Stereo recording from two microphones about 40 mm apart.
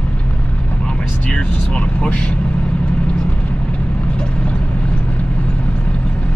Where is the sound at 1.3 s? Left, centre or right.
Left.